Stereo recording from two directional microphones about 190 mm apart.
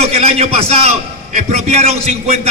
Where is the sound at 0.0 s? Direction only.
30° right (ahead or behind).